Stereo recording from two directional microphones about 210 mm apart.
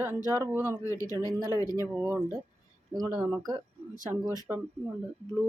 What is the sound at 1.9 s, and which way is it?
Speech, 10° right (ahead or behind).